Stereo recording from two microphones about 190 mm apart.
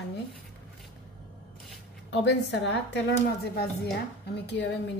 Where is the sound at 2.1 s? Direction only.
65° left (ahead or behind).